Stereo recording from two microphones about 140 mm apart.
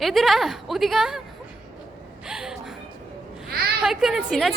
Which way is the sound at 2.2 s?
5° right (ahead or behind).